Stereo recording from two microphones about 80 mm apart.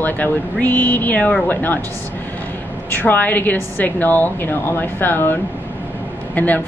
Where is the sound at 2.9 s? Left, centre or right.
Left.